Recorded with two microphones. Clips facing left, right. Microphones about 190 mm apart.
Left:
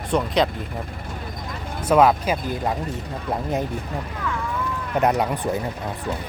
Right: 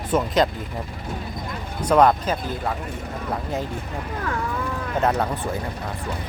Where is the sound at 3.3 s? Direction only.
20° left (ahead or behind).